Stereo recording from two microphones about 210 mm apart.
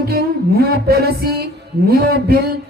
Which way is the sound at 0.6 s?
50° right (ahead or behind).